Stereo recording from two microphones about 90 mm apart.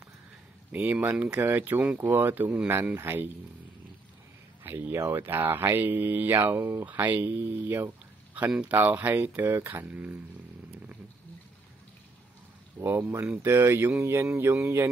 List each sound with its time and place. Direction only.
0.7 s speech: 20° right (ahead or behind)
4.6 s speech: 25° right (ahead or behind)
12.7 s speech: 30° right (ahead or behind)